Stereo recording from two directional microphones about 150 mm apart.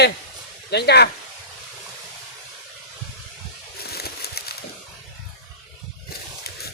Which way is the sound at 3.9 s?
90° left.